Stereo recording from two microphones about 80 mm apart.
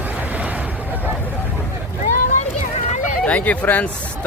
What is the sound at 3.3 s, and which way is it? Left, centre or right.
Speech, centre.